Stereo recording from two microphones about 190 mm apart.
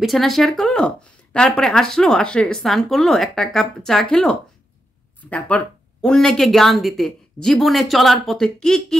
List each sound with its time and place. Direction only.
0.0 s speech: centre (ahead or behind)